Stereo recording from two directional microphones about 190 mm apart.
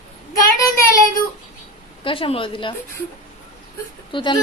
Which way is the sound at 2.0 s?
30° left (ahead or behind).